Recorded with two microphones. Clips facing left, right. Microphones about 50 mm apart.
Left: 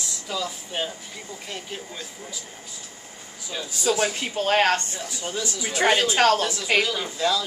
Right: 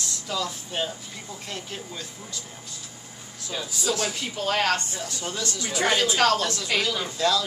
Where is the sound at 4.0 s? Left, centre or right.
Left.